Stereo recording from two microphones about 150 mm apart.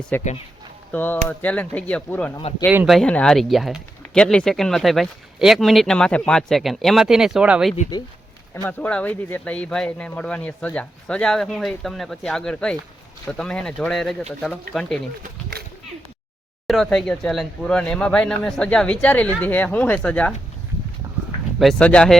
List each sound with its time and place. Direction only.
0.1 s speech: 10° left (ahead or behind); by 7.7 s 5° right (ahead or behind)
8.5 s speech: 20° left (ahead or behind); by 15.0 s 5° left (ahead or behind)
16.6 s speech: centre (ahead or behind)
21.6 s speech: 5° left (ahead or behind)